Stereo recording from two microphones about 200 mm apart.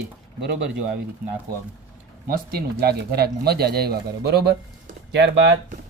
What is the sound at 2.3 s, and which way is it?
Speech, 50° right (ahead or behind).